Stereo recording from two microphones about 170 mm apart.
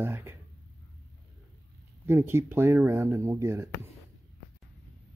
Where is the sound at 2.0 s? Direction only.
15° right (ahead or behind).